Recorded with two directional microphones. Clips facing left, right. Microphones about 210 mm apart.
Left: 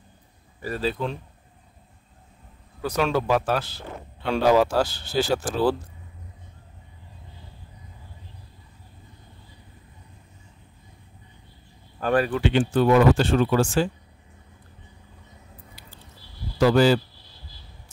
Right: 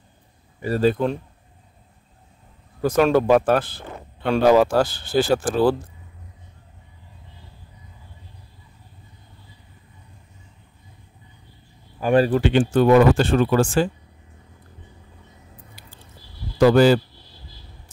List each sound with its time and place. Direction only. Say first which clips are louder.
0.7 s speech: right 8 dB; 50° right (ahead or behind)
2.8 s speech: right 7 dB; 50° right (ahead or behind)
12.1 s speech: right 5 dB; 30° right (ahead or behind)
12.4 s speech: right 3 dB; 45° right (ahead or behind)
16.5 s speech: right 4 dB; 50° right (ahead or behind)